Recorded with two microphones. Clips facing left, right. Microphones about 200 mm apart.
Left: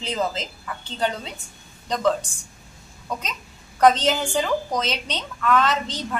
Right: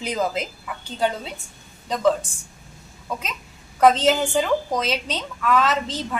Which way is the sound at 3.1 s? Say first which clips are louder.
Even; 5° right (ahead or behind).